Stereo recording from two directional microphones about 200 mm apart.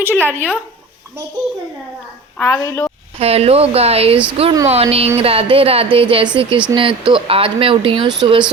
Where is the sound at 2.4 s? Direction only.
15° left (ahead or behind).